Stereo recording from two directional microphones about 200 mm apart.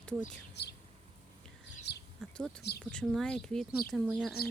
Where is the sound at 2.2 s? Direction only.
5° left (ahead or behind).